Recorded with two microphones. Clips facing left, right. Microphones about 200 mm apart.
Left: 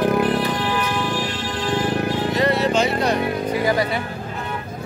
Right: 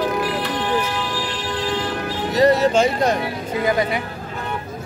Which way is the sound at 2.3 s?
40° right (ahead or behind).